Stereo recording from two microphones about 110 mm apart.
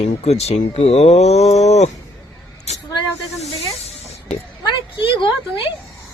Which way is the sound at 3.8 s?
75° left (ahead or behind).